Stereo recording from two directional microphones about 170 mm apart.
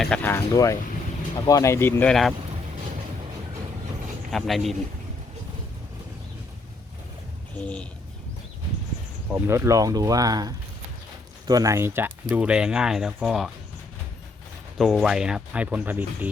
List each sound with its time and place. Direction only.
0.0 s speech: 10° left (ahead or behind)
4.3 s speech: centre (ahead or behind)
9.3 s speech: 15° right (ahead or behind)
14.8 s speech: centre (ahead or behind)